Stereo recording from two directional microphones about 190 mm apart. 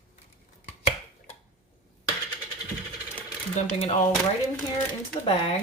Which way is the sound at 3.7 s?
30° left (ahead or behind).